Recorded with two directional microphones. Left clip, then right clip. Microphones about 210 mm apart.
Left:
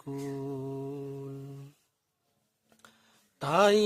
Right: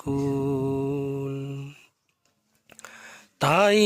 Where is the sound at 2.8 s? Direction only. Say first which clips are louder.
Right 16 dB; 30° right (ahead or behind).